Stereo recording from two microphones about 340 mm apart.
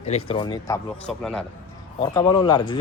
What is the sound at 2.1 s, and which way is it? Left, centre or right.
Speech, centre.